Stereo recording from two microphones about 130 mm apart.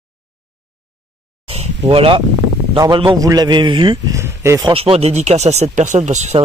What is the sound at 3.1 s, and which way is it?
Speech, 30° right (ahead or behind).